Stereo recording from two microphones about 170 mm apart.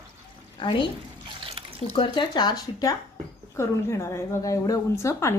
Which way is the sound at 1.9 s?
30° left (ahead or behind).